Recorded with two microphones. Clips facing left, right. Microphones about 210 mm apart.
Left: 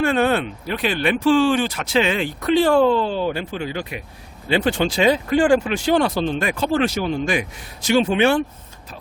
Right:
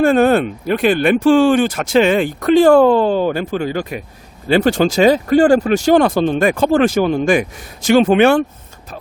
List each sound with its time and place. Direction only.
0.0 s speech: 45° right (ahead or behind)
8.0 s speech: 60° right (ahead or behind)